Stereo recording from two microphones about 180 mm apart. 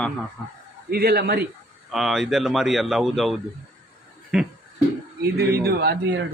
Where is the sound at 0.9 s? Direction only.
60° right (ahead or behind).